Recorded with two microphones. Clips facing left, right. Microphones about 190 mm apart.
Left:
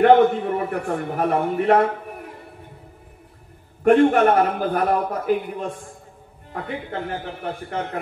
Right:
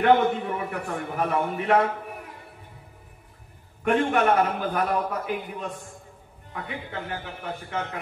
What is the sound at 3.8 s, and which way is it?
A man's voice, 45° left (ahead or behind).